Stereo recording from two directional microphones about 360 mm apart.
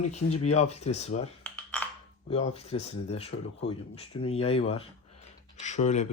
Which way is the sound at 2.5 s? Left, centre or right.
Centre.